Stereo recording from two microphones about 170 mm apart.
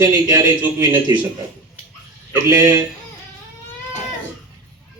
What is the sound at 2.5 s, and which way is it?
Speech, 20° right (ahead or behind).